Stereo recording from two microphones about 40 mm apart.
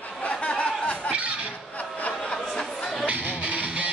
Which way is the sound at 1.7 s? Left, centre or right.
Left.